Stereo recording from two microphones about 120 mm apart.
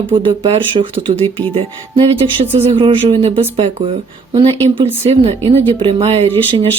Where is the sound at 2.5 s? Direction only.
50° right (ahead or behind).